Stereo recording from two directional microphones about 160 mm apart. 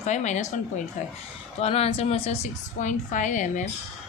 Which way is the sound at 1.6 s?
40° left (ahead or behind).